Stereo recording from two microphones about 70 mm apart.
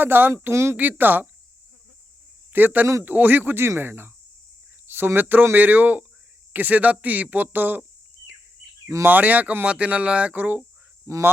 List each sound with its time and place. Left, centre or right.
0.0 s speech: right
0.8 s speech: right
2.5 s speech: right
9.0 s speech: right
11.0 s speech: right